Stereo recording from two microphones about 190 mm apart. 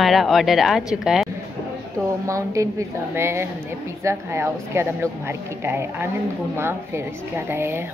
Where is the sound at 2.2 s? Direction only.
15° right (ahead or behind).